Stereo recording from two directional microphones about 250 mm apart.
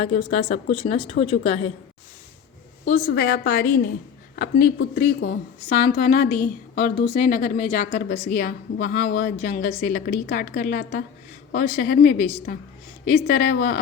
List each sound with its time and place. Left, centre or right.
0.1 s speech: left
2.9 s a woman's voice: left